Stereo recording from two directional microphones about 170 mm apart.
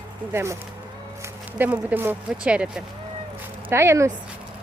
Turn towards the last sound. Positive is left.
turn(degrees=-15)  # may be behind; listen again after turning